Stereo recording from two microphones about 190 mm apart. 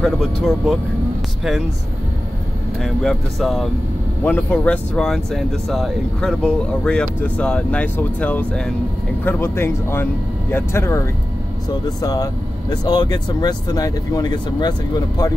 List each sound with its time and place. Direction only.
0.0 s speech: centre (ahead or behind)
2.8 s speech: centre (ahead or behind); by 15.3 s 20° left (ahead or behind)